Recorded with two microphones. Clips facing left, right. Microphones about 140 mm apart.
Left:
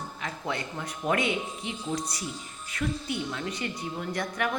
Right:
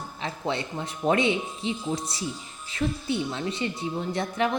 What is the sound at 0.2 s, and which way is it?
A woman's voice, 25° right (ahead or behind).